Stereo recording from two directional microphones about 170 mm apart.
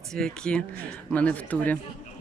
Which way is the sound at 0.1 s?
5° left (ahead or behind).